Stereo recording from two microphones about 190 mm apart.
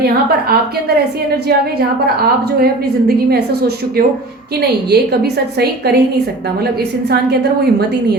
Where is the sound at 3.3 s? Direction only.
55° right (ahead or behind).